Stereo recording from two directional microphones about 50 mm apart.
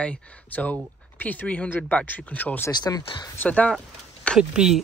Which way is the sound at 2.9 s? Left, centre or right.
Left.